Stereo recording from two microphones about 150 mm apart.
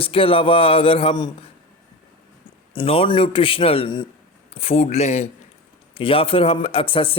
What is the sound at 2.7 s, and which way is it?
Speech, 40° left (ahead or behind).